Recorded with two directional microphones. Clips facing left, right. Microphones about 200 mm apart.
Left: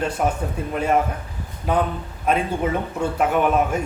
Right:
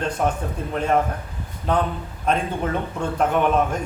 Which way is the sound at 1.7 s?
10° left (ahead or behind).